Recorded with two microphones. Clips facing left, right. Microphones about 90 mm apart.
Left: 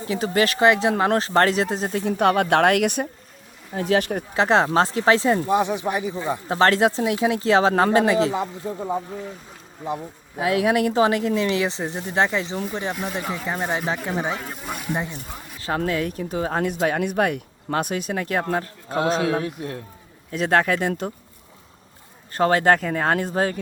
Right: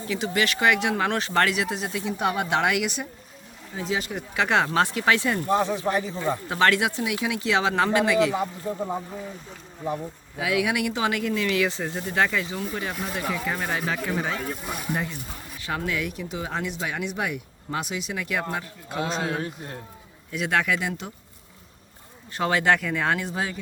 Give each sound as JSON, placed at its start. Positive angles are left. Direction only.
{"t": 0.1, "sound": "speech", "side_deg": 35}
{"t": 4.4, "sound": "speech", "side_deg": 30}
{"t": 5.5, "sound": "speech", "side_deg": 15}
{"t": 6.5, "sound": "speech", "side_deg": 35}
{"t": 10.3, "sound": "speech", "side_deg": 40}
{"t": 15.6, "sound": "speech", "side_deg": 35}
{"t": 19.2, "sound": "a man's voice", "side_deg": 80}
{"t": 20.3, "sound": "speech", "side_deg": 40}
{"t": 22.3, "sound": "speech", "side_deg": 40}